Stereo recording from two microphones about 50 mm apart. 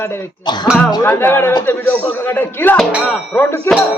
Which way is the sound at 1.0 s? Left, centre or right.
Left.